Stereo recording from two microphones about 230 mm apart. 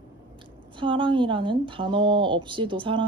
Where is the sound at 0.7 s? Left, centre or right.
Right.